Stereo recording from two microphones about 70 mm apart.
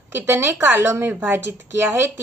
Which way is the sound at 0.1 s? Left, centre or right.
Right.